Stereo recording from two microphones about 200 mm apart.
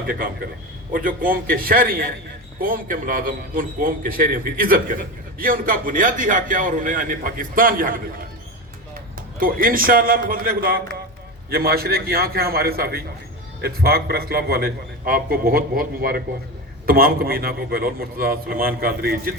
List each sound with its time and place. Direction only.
0.9 s a man's voice: 45° right (ahead or behind)
9.4 s a man's voice: 45° right (ahead or behind)